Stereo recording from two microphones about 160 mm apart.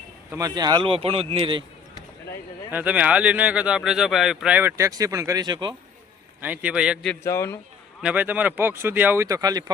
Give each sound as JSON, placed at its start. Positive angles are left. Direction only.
{"t": 0.3, "sound": "speech", "side_deg": -20}
{"t": 2.7, "sound": "speech", "side_deg": -10}
{"t": 6.4, "sound": "speech", "side_deg": -10}
{"t": 7.3, "sound": "a man's voice", "side_deg": 15}
{"t": 8.0, "sound": "speech", "side_deg": -10}